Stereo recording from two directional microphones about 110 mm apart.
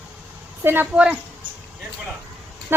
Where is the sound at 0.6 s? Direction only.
20° right (ahead or behind).